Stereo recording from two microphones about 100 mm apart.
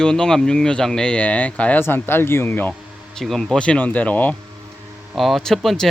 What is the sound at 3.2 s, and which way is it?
Speech, 5° left (ahead or behind).